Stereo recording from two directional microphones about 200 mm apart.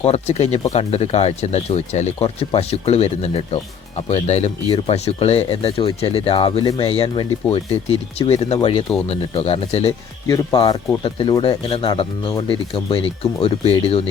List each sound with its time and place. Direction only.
0.0 s speech: 30° left (ahead or behind)
10.2 s speech: 20° left (ahead or behind)